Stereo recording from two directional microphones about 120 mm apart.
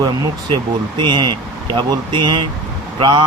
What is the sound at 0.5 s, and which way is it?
Speech, 40° right (ahead or behind).